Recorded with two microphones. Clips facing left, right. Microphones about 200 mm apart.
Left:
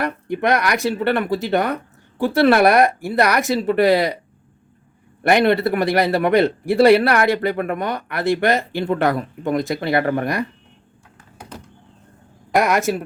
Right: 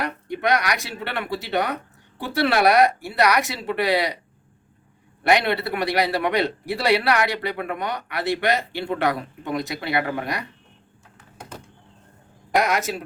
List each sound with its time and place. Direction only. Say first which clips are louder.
0.0 s a man's voice: left 4 dB; 50° left (ahead or behind)
5.3 s a man's voice: left 5 dB; 50° left (ahead or behind)
12.5 s a man's voice: left 4 dB; 50° left (ahead or behind)